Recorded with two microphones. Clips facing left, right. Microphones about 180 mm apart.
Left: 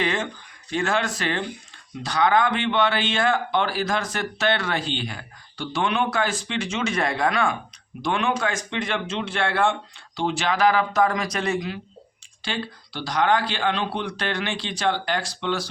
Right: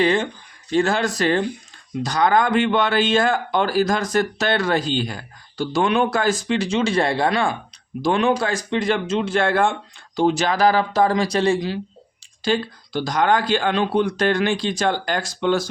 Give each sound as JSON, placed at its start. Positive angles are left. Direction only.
{"t": 0.0, "sound": "speech", "side_deg": -35}
{"t": 12.4, "sound": "speech", "side_deg": -45}